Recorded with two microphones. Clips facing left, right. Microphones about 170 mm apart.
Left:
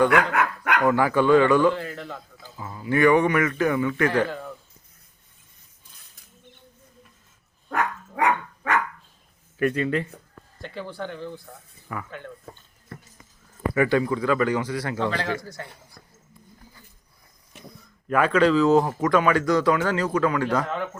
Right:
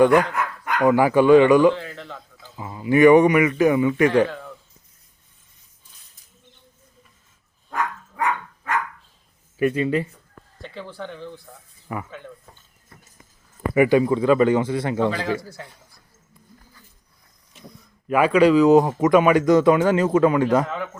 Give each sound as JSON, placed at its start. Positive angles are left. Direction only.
{"t": 0.3, "sound": "dog", "side_deg": 70}
{"t": 0.9, "sound": "a man's voice", "side_deg": -15}
{"t": 1.7, "sound": "a sound", "side_deg": 5}
{"t": 2.6, "sound": "a man's voice", "side_deg": -15}
{"t": 4.3, "sound": "a sound", "side_deg": 5}
{"t": 7.7, "sound": "dog", "side_deg": 70}
{"t": 9.6, "sound": "a man's voice", "side_deg": -10}
{"t": 10.6, "sound": "speech", "side_deg": 0}
{"t": 11.9, "sound": "a man's voice", "side_deg": -20}
{"t": 12.9, "sound": "horse", "side_deg": 70}
{"t": 13.7, "sound": "speech", "side_deg": -15}
{"t": 15.1, "sound": "a man's voice", "side_deg": -5}
{"t": 18.1, "sound": "speech", "side_deg": -10}
{"t": 20.7, "sound": "speech", "side_deg": 0}